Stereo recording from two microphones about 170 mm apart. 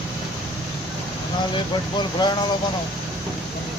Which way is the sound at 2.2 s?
25° left (ahead or behind).